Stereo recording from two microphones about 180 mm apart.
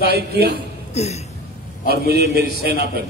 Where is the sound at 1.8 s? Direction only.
60° right (ahead or behind).